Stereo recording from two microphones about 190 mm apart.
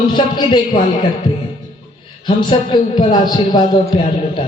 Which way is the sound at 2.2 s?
25° left (ahead or behind).